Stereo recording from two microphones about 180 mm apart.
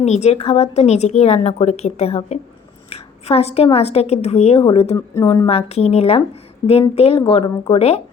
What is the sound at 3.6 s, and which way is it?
Speech, 35° left (ahead or behind).